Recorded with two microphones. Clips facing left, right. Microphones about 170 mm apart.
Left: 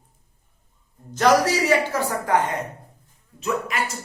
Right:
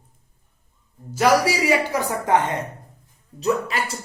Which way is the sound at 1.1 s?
10° right (ahead or behind).